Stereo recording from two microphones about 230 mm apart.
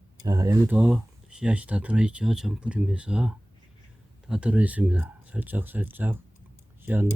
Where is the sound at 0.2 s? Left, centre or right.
Centre.